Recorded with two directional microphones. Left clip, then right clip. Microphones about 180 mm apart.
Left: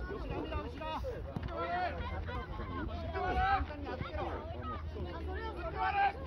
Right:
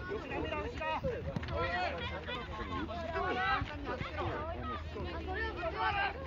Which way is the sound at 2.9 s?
50° right (ahead or behind).